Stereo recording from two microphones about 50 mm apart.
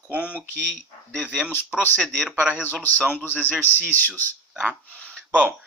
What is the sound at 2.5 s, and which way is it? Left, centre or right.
Speech, left.